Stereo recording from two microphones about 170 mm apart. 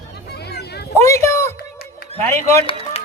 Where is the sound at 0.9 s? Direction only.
15° left (ahead or behind).